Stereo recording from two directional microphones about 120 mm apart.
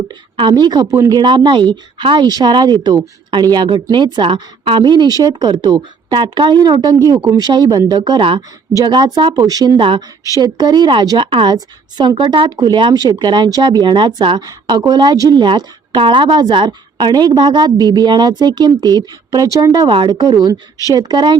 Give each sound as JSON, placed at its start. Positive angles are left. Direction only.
{"t": 0.1, "sound": "speech", "side_deg": -40}